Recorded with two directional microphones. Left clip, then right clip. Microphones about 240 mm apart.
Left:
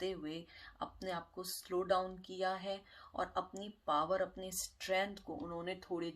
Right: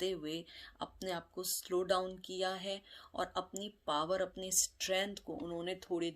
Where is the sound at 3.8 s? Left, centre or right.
Right.